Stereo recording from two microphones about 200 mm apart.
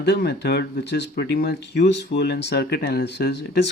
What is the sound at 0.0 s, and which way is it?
Speech, 55° left (ahead or behind).